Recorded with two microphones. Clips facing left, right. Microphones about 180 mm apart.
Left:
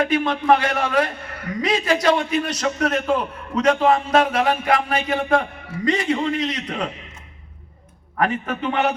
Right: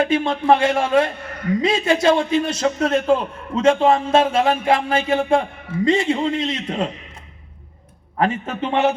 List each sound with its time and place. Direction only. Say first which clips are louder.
0.0 s speech: right 1 dB; 25° right (ahead or behind)
8.2 s speech: right 1 dB; 25° right (ahead or behind)